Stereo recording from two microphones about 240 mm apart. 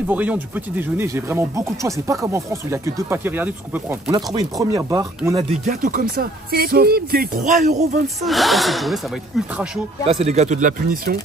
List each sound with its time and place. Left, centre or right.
0.1 s speech: centre
5.7 s speech: right
8.2 s speech: centre
10.0 s speech: right